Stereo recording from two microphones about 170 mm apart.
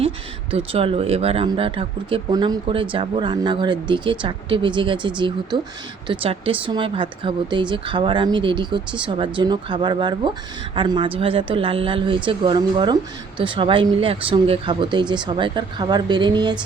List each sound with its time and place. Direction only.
0.5 s a woman's voice: 35° right (ahead or behind)